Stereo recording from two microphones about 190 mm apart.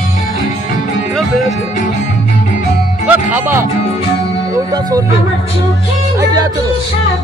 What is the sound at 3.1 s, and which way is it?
Music, 10° right (ahead or behind).